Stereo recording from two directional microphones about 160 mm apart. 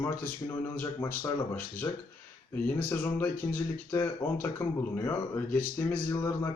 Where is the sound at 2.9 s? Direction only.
10° left (ahead or behind).